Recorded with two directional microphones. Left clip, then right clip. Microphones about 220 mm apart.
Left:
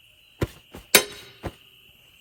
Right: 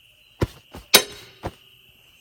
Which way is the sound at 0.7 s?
15° right (ahead or behind).